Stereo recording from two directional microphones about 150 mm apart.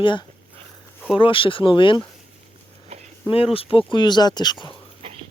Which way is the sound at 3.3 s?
40° left (ahead or behind).